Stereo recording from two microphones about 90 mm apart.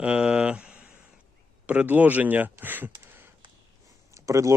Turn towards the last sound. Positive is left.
turn(degrees=-35)  # may be behind; listen again after turning